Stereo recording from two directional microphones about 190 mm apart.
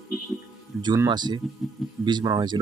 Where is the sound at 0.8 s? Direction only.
25° right (ahead or behind).